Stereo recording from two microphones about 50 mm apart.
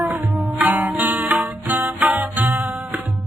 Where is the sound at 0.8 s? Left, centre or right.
Right.